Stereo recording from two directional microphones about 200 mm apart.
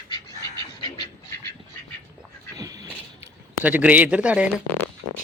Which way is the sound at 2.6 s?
20° right (ahead or behind).